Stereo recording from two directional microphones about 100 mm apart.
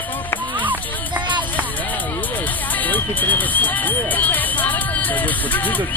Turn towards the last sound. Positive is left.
turn(degrees=15)  # may be behind; listen again after turning